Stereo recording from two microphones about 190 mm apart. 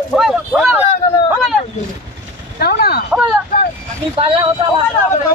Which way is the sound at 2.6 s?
55° left (ahead or behind).